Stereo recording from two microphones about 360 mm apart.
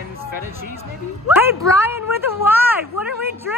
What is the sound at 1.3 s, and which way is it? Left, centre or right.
Speech, centre.